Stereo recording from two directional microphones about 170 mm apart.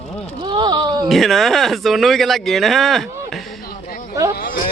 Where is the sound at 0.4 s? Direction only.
25° right (ahead or behind).